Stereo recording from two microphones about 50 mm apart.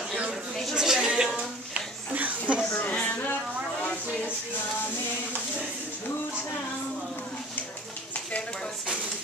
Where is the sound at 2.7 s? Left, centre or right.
Left.